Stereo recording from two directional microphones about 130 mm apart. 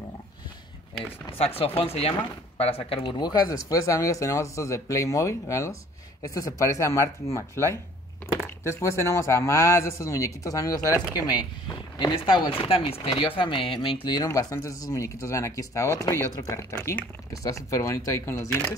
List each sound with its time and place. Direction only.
1.4 s speech: 50° left (ahead or behind)
3.2 s speech: 30° left (ahead or behind)
12.0 s speech: 35° left (ahead or behind)
14.0 s speech: 30° left (ahead or behind)